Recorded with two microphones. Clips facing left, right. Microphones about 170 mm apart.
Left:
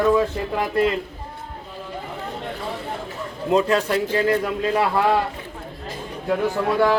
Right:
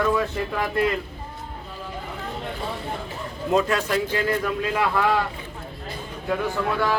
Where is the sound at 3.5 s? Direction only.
30° left (ahead or behind).